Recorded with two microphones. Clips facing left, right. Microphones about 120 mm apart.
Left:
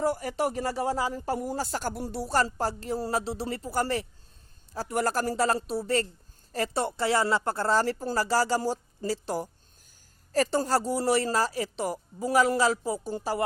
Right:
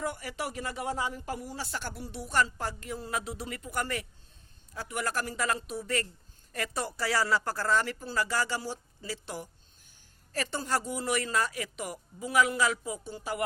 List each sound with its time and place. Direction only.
0.0 s speech: 35° left (ahead or behind)